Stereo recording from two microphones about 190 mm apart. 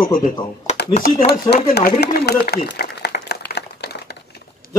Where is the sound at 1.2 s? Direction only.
60° left (ahead or behind).